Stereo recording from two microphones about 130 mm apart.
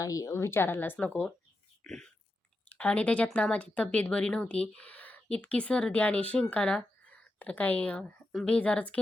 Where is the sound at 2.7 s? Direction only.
10° left (ahead or behind).